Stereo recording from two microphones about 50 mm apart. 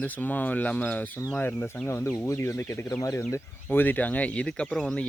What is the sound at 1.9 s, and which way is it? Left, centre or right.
Speech, left.